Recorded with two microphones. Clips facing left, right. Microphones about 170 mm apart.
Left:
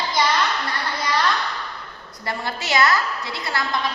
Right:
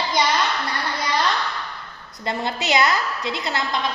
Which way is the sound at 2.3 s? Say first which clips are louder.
Right 3 dB; 20° right (ahead or behind).